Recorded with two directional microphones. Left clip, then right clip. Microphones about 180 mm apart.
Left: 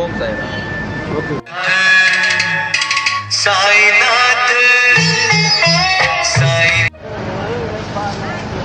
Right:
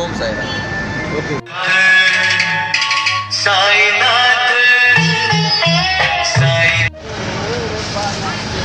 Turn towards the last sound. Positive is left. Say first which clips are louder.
# left 1 dB
turn(degrees=-45)  # may be behind; listen again after turning